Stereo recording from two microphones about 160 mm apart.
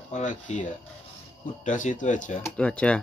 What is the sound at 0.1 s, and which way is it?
Speech, 50° left (ahead or behind).